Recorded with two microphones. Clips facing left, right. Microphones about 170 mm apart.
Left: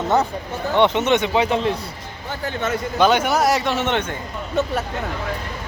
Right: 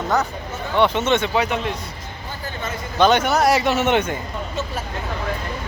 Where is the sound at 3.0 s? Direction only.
10° left (ahead or behind); by 4.0 s 10° right (ahead or behind).